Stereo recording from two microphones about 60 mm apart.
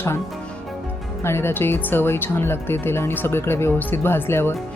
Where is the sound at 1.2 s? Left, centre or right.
Left.